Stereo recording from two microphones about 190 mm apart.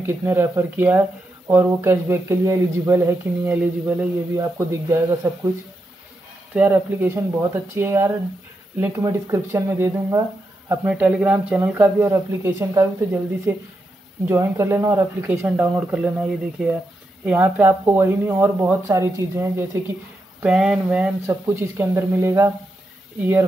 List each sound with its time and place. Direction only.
0.0 s speech: 10° right (ahead or behind)
6.5 s speech: 10° right (ahead or behind)